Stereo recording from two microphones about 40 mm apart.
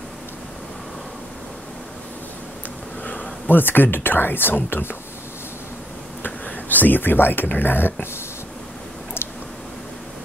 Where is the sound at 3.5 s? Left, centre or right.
Left.